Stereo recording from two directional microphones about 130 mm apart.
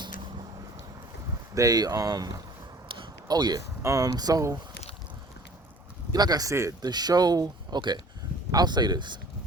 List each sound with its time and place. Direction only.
1.5 s speech: 30° right (ahead or behind)
6.1 s speech: 30° right (ahead or behind)